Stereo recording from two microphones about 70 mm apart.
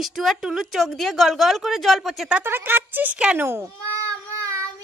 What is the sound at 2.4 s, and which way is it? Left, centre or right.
Speech, right.